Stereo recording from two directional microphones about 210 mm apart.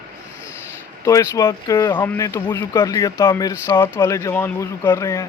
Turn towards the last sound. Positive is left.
turn(degrees=15)  # may be behind; listen again after turning